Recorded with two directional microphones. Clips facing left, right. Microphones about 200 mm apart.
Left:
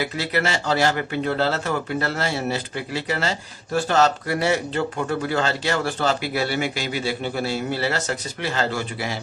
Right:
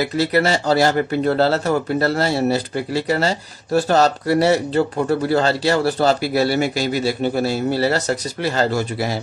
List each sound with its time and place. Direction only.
0.0 s speech: 40° right (ahead or behind)